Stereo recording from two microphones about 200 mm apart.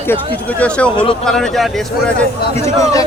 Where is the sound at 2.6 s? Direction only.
15° left (ahead or behind).